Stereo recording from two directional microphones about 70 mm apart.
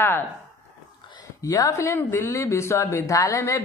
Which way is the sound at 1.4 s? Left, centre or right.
Left.